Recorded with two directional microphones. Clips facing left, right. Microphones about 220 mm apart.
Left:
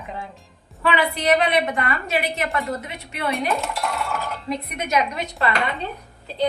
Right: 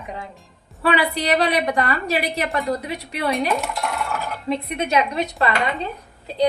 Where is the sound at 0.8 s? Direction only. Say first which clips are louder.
Right 2 dB; 35° right (ahead or behind).